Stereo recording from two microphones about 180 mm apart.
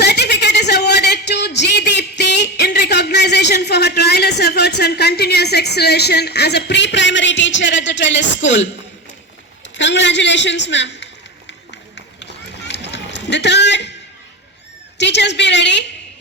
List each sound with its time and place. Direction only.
0.0 s a sound: 70° left (ahead or behind); by 8.7 s 90° left
9.7 s a man's voice: 85° left
11.7 s run: 75° left (ahead or behind)
14.9 s a woman's voice: 75° left (ahead or behind)